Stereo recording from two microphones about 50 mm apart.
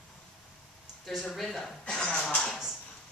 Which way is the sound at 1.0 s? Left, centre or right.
Centre.